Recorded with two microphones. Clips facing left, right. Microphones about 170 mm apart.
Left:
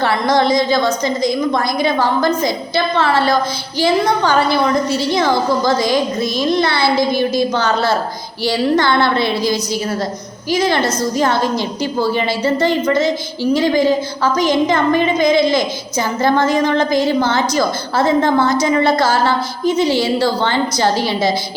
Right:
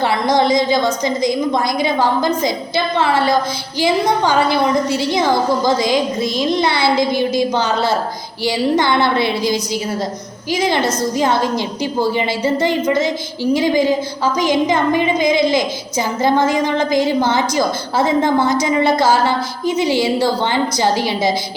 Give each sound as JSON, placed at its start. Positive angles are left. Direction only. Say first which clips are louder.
{"t": 0.0, "sound": "a woman's voice", "louder": "even", "side_deg": -20}